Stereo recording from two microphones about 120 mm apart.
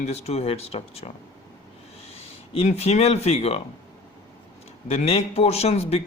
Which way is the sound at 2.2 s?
60° left (ahead or behind).